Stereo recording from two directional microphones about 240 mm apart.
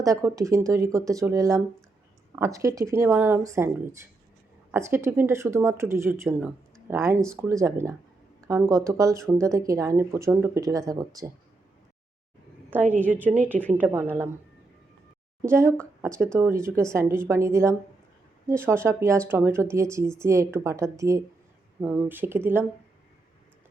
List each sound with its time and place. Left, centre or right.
0.0 s speech: centre
12.7 s speech: centre
13.5 s a woman's voice: centre
13.7 s speech: centre
15.4 s speech: centre